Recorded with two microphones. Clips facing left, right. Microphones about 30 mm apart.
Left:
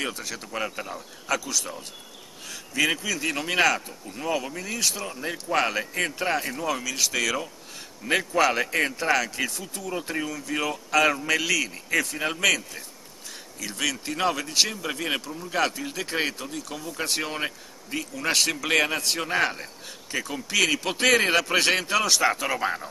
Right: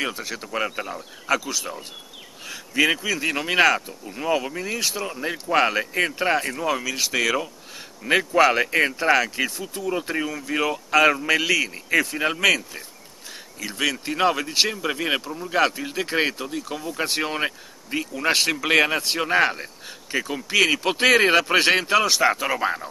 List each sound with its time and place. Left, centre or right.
0.0 s speech: centre